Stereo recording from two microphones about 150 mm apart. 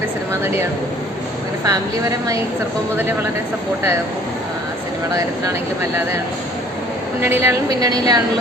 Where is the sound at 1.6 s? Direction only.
25° right (ahead or behind).